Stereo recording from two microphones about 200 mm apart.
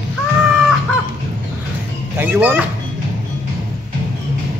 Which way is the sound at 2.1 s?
10° right (ahead or behind).